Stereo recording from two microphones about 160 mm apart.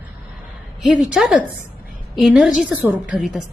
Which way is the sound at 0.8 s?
5° right (ahead or behind).